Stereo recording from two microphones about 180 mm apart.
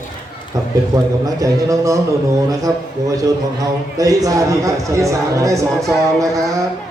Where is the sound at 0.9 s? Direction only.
20° right (ahead or behind).